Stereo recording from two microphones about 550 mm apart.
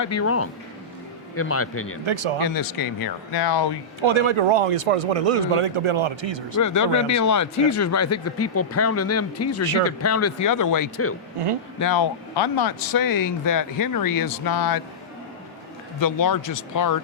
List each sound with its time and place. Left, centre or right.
0.0 s a man's voice: left
2.0 s speech: right
2.4 s speech: left
4.0 s speech: right
6.6 s a man's voice: left
16.0 s speech: left